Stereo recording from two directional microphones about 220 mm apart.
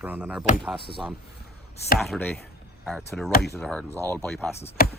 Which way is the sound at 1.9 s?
Centre (ahead or behind).